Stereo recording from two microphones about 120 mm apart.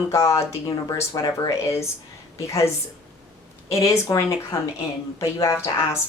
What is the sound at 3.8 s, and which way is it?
A woman's voice, 25° left (ahead or behind).